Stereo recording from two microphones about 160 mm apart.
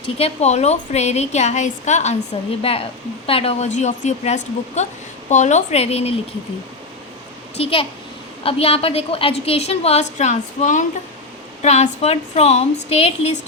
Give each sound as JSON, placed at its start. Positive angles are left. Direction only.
{"t": 0.0, "sound": "a woman's voice", "side_deg": 40}
{"t": 2.6, "sound": "a woman's voice", "side_deg": 35}
{"t": 7.5, "sound": "a child's voice", "side_deg": 35}